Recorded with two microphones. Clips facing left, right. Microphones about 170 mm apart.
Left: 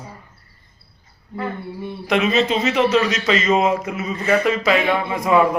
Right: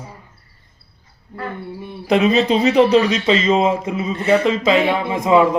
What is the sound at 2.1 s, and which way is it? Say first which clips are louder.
A man's voice: right 4 dB; 35° right (ahead or behind).